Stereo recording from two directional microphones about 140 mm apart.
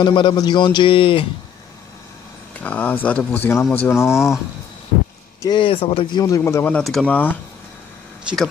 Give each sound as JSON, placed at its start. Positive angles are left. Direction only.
{"t": 0.0, "sound": "speech", "side_deg": 35}
{"t": 2.6, "sound": "speech", "side_deg": 10}
{"t": 5.4, "sound": "speech", "side_deg": 35}
{"t": 6.8, "sound": "speech", "side_deg": 5}